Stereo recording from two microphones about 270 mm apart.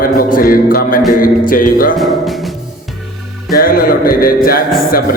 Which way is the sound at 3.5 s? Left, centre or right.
Left.